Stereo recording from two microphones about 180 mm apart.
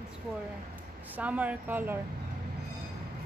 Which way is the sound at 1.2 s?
10° right (ahead or behind).